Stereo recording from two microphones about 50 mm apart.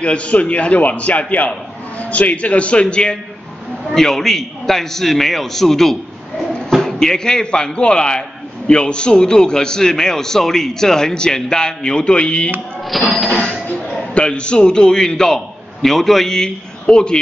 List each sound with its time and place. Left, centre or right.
0.0 s a man's voice: left
3.9 s a man's voice: centre
13.1 s a man's voice: centre
13.7 s a man's voice: left